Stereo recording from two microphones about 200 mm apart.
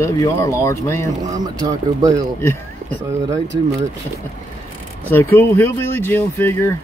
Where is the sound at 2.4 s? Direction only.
10° left (ahead or behind).